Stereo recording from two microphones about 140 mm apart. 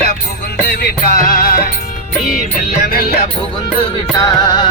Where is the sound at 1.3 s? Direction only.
90° left.